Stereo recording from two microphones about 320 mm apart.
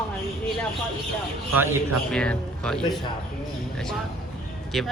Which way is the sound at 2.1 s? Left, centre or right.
Centre.